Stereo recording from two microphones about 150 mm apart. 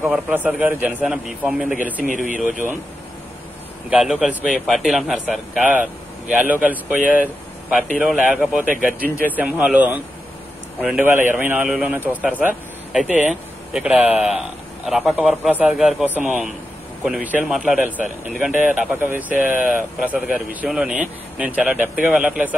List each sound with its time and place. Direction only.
0.0 s speech: 10° right (ahead or behind)
2.3 s speech: 60° right (ahead or behind)
3.9 s speech: 5° right (ahead or behind)
8.0 s speech: 10° right (ahead or behind)
18.5 s speech: 60° left (ahead or behind)
18.9 s speech: 10° right (ahead or behind)